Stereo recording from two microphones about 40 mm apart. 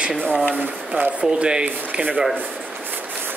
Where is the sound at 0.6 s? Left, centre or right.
Right.